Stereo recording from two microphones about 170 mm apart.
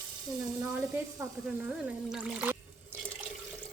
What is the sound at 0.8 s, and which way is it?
Speech, 15° right (ahead or behind).